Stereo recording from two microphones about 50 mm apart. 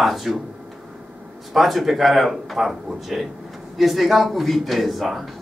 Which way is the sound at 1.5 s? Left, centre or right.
Centre.